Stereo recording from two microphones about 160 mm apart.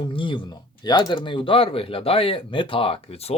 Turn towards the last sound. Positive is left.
turn(degrees=40)  # may be behind; listen again after turning